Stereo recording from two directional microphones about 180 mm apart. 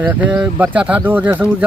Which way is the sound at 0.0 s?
10° right (ahead or behind).